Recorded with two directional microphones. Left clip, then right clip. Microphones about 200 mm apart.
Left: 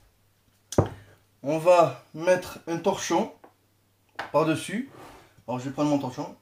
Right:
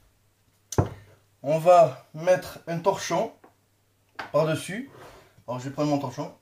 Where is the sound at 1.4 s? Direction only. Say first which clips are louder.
Right 2 dB; 10° left (ahead or behind).